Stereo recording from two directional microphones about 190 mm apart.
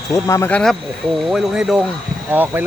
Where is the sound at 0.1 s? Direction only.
15° left (ahead or behind).